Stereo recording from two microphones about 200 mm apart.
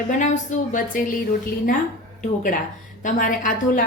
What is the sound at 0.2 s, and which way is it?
Speech, 35° left (ahead or behind).